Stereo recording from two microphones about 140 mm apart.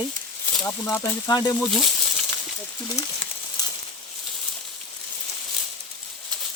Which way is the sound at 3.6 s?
30° left (ahead or behind).